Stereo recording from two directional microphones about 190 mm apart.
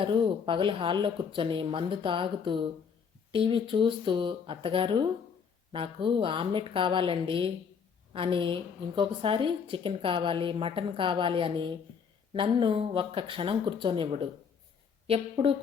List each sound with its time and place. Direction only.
0.0 s a woman's voice: 25° right (ahead or behind)